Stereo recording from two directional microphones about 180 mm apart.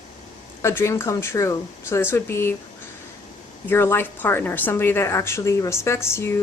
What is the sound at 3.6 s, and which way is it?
A woman's voice, 15° left (ahead or behind).